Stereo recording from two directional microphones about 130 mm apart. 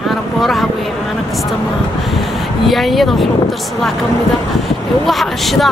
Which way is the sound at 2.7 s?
Centre (ahead or behind).